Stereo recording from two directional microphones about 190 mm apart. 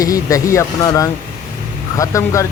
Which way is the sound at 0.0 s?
20° left (ahead or behind).